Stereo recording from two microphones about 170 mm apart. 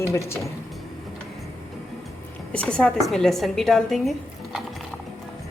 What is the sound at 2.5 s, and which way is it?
A woman's voice, 5° left (ahead or behind).